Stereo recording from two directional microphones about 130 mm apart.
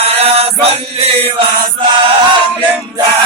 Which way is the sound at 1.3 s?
40° right (ahead or behind).